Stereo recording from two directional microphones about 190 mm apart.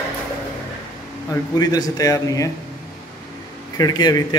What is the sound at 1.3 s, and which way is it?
A man's voice, 20° left (ahead or behind).